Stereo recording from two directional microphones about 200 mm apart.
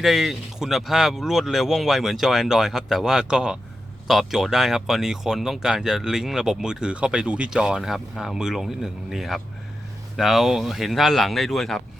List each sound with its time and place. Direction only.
0.0 s speech: centre (ahead or behind)